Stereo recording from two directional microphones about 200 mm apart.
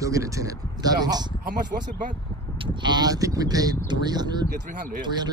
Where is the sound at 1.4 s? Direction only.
40° right (ahead or behind).